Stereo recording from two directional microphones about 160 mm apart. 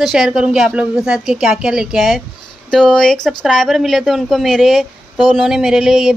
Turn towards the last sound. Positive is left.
turn(degrees=-5)  # may be behind; listen again after turning